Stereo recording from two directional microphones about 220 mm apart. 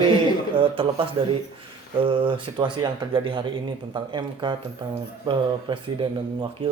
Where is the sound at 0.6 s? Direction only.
25° right (ahead or behind).